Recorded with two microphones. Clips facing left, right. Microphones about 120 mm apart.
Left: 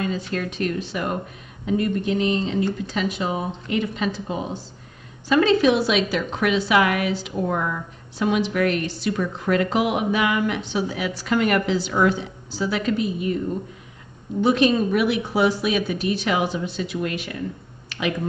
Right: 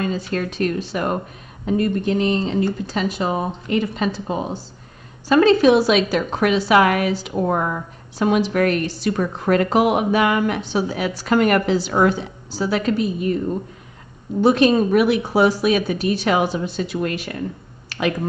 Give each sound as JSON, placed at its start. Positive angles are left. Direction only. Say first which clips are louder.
{"t": 0.0, "sound": "a woman's voice", "louder": "right 3 dB", "side_deg": -45}
{"t": 14.4, "sound": "a woman's voice", "louder": "right 3 dB", "side_deg": -45}
{"t": 17.8, "sound": "a sound", "louder": "right 4 dB", "side_deg": -45}